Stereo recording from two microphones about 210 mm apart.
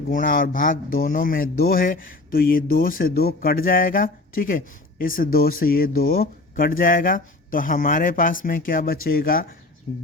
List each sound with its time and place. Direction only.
0.1 s speech: 40° left (ahead or behind)